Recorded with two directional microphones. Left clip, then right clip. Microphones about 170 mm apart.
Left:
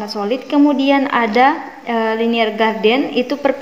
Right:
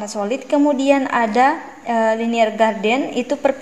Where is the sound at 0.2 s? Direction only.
25° right (ahead or behind).